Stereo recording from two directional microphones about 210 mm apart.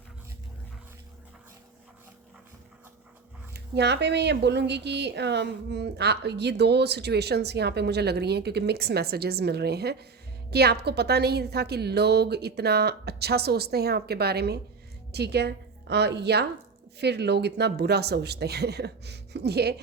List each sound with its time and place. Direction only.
3.5 s a woman's voice: 55° right (ahead or behind)